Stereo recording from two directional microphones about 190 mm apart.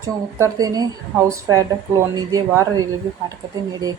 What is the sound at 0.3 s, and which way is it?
A woman's voice, 15° right (ahead or behind).